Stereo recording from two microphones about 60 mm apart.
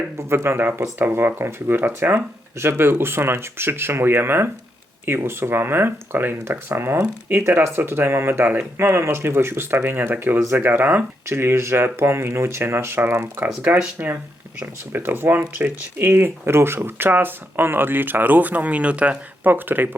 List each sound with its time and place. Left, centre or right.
0.2 s speech: right
14.9 s speech: right
19.5 s speech: right